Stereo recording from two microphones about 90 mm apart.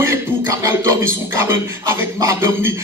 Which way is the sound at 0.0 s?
30° right (ahead or behind).